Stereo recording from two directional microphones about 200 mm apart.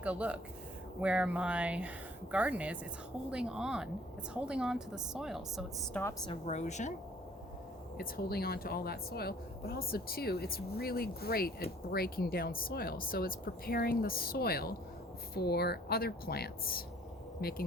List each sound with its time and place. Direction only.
0.0 s speech: 5° right (ahead or behind)
6.2 s speech: 30° left (ahead or behind)
7.9 s a woman's voice: 50° left (ahead or behind)